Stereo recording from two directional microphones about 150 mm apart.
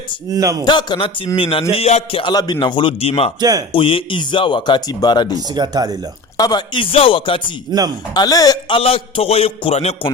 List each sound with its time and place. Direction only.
0.3 s speech: 20° right (ahead or behind)
0.6 s speech: 30° left (ahead or behind)
2.2 s speech: 25° left (ahead or behind)
5.5 s speech: 30° right (ahead or behind)
6.3 s speech: 25° left (ahead or behind)
8.1 s speech: 25° left (ahead or behind)
8.8 s speech: 40° left (ahead or behind)